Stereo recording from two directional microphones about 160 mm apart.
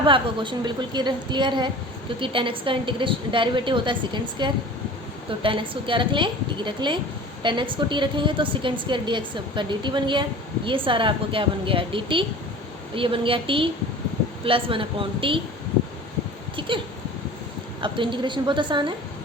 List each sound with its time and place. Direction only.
0.0 s a woman's voice: 30° right (ahead or behind)
16.6 s a sound: 30° right (ahead or behind)
17.7 s a woman's voice: 30° right (ahead or behind)